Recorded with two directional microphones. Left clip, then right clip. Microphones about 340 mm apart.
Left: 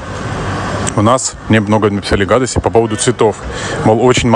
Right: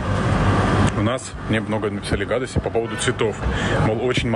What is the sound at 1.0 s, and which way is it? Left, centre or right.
Speech, left.